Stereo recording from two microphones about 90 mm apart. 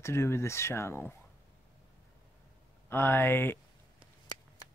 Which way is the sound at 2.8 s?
25° left (ahead or behind).